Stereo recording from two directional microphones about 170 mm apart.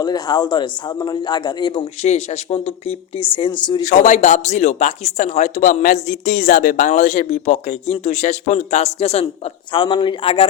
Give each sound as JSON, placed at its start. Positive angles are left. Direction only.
{"t": 0.0, "sound": "a man's voice", "side_deg": 25}
{"t": 3.8, "sound": "speech", "side_deg": 45}